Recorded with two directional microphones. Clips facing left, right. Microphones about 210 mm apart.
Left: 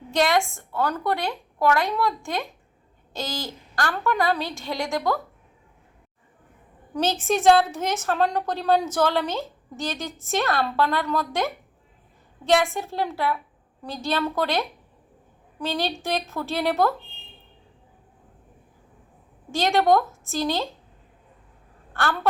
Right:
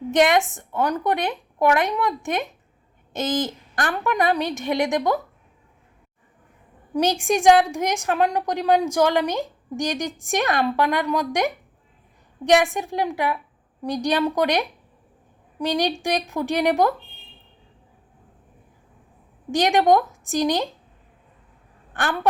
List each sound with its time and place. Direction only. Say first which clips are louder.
0.1 s a woman's voice: right 4 dB; 20° right (ahead or behind)
6.9 s a woman's voice: right 3 dB; 15° right (ahead or behind)
19.5 s a woman's voice: right 2 dB; 15° right (ahead or behind)
21.9 s a woman's voice: right 1 dB; 15° right (ahead or behind)